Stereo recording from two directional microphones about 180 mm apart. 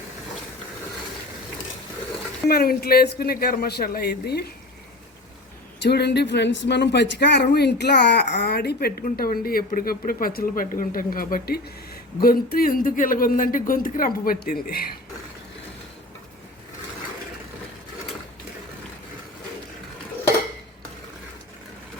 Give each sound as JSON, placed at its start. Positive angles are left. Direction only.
{"t": 2.5, "sound": "speech", "side_deg": 55}
{"t": 5.8, "sound": "speech", "side_deg": 70}